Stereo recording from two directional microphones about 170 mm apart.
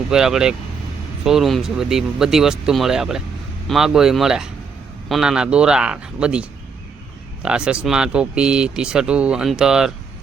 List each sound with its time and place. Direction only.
0.1 s speech: 5° right (ahead or behind)